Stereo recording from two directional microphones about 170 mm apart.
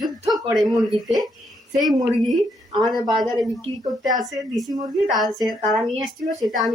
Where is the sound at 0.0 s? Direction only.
Centre (ahead or behind).